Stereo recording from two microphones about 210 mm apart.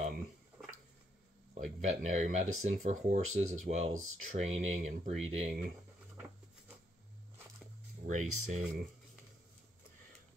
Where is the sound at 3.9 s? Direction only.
80° right.